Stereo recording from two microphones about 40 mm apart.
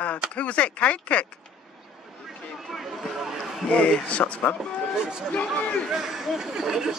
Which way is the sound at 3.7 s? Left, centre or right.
Left.